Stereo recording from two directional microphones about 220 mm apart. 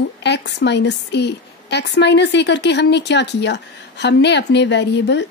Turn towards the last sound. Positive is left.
turn(degrees=50)  # may be behind; listen again after turning